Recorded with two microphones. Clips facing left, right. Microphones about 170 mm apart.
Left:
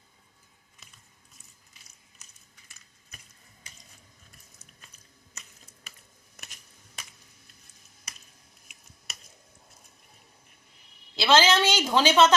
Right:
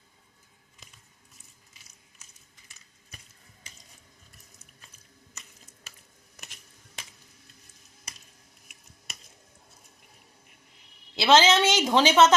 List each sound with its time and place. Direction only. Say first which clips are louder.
11.2 s a woman's voice: right 2 dB; 20° right (ahead or behind)